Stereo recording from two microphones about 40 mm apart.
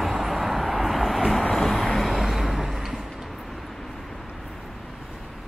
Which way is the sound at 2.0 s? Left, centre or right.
Centre.